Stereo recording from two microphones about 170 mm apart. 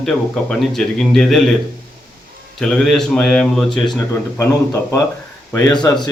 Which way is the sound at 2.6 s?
Centre (ahead or behind).